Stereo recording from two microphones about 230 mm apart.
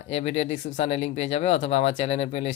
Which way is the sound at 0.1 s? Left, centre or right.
Left.